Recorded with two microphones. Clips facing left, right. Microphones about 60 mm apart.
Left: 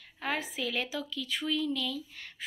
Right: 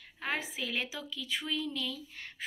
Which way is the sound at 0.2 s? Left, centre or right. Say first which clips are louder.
Left 2 dB; right.